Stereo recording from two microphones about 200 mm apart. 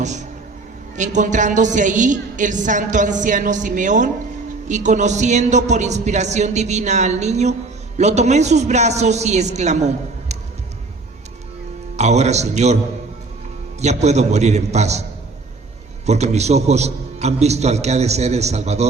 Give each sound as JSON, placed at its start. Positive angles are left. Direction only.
{"t": 0.0, "sound": "a woman's voice", "side_deg": -35}
{"t": 11.9, "sound": "a woman's voice", "side_deg": -35}
{"t": 13.8, "sound": "a woman's voice", "side_deg": -35}
{"t": 16.0, "sound": "a woman's voice", "side_deg": -35}